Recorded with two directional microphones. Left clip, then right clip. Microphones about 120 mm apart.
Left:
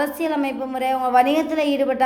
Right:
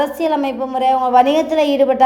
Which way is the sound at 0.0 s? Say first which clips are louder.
Right 5 dB; 25° right (ahead or behind).